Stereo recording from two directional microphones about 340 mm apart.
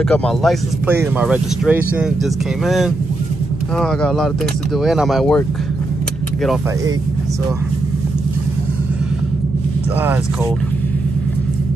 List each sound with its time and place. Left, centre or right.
0.1 s speech: centre